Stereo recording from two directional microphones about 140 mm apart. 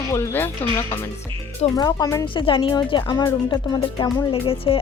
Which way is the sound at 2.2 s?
40° left (ahead or behind).